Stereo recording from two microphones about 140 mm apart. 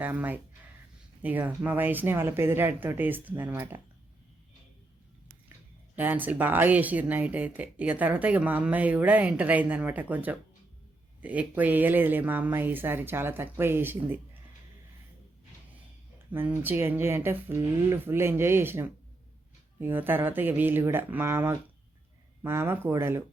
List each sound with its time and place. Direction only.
0.0 s speech: 10° right (ahead or behind)
6.0 s speech: 10° right (ahead or behind)
16.1 s speech: 15° right (ahead or behind)